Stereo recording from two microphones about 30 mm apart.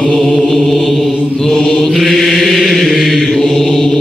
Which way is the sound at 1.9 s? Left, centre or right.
Centre.